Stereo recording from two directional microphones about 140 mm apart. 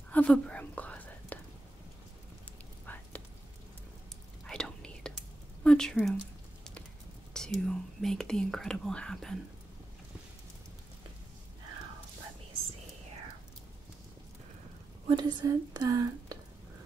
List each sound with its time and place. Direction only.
0.1 s whispering: 5° left (ahead or behind)
2.9 s whispering: 10° left (ahead or behind)
4.5 s whispering: 5° left (ahead or behind)
5.6 s a sound: 5° left (ahead or behind)
7.3 s speech: 5° left (ahead or behind)
15.0 s speech: 35° right (ahead or behind)